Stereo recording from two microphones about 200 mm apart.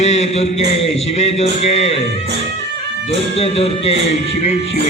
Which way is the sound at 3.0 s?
30° left (ahead or behind).